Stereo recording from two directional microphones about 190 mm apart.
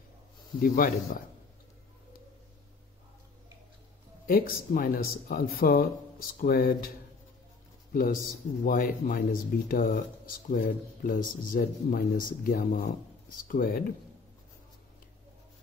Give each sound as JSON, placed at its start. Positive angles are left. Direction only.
{"t": 0.6, "sound": "speech", "side_deg": 50}
{"t": 4.3, "sound": "speech", "side_deg": 50}
{"t": 7.9, "sound": "a man's voice", "side_deg": 50}